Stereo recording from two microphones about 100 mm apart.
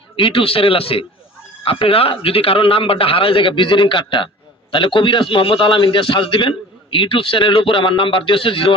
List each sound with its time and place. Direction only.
0.2 s a man's voice: 65° left (ahead or behind)